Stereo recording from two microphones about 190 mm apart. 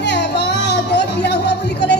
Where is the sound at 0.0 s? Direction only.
60° left (ahead or behind).